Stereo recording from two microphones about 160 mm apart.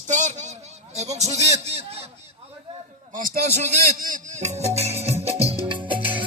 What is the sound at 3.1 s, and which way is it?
Music, 55° right (ahead or behind).